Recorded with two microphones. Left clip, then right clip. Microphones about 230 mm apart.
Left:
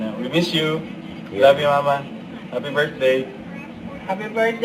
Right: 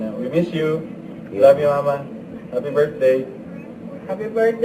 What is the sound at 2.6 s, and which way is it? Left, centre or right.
Speech, centre.